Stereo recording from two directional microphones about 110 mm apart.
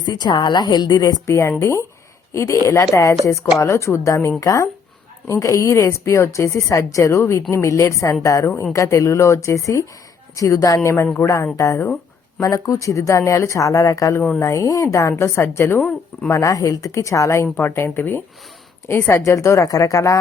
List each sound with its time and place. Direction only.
0.0 s a woman's voice: 40° left (ahead or behind)
1.3 s a woman's voice: 25° left (ahead or behind)